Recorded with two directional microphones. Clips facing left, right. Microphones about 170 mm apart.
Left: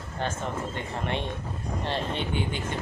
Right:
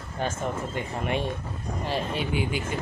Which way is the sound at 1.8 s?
5° right (ahead or behind).